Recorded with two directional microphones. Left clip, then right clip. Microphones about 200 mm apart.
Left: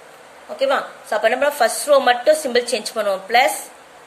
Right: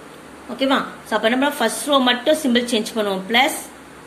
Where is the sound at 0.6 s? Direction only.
20° left (ahead or behind).